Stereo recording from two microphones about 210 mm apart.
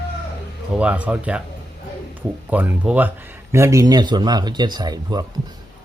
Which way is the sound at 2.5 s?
10° right (ahead or behind).